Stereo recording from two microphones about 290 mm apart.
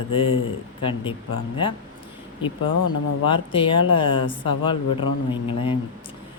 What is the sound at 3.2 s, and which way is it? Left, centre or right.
Speech, centre.